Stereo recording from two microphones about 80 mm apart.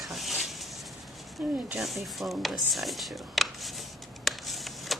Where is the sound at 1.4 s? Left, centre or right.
Centre.